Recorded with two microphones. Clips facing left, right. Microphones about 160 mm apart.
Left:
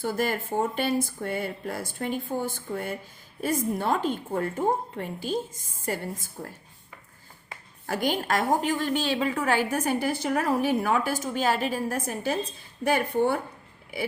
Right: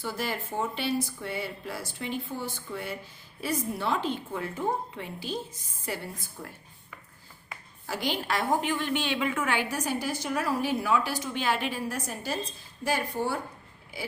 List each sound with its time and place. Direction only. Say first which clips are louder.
0.0 s a woman's voice: left 5 dB; 50° left (ahead or behind)
7.9 s a woman's voice: left 4 dB; 50° left (ahead or behind)